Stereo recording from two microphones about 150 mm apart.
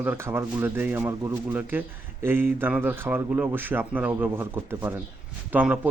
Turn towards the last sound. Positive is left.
turn(degrees=-10)  # may be behind; listen again after turning